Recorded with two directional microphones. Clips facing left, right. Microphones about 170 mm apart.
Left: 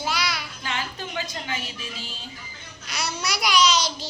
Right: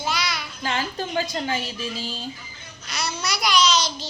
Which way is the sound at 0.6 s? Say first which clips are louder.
Right 8 dB; 35° right (ahead or behind).